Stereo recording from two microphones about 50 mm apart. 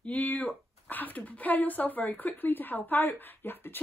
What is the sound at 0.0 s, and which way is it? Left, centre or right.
Speech, left.